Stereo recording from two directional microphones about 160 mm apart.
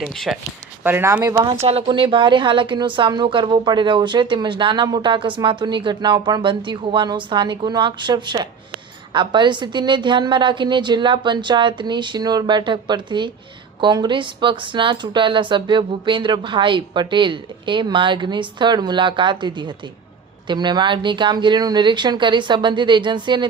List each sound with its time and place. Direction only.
0.0 s speech: centre (ahead or behind)
0.9 s speech: 15° right (ahead or behind)
1.6 s speech: 35° right (ahead or behind)